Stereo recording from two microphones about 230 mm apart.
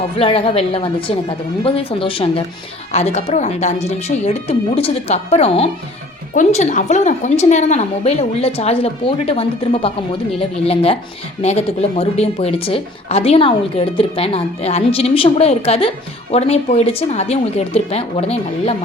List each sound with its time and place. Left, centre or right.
0.2 s a woman's voice: left